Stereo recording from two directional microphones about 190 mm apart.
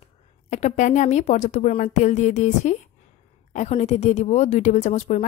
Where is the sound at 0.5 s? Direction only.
40° left (ahead or behind).